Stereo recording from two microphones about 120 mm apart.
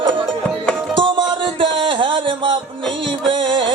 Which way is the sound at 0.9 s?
45° right (ahead or behind).